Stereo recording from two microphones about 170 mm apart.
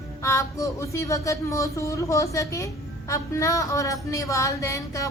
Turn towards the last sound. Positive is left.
turn(degrees=20)  # may be behind; listen again after turning